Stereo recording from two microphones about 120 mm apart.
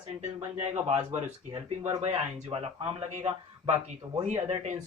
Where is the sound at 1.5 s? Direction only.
50° right (ahead or behind).